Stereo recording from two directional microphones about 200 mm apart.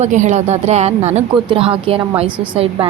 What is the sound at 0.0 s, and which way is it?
Speech, 35° right (ahead or behind).